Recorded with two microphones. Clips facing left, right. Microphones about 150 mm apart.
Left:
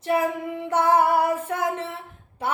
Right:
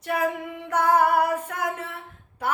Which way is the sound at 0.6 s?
25° left (ahead or behind).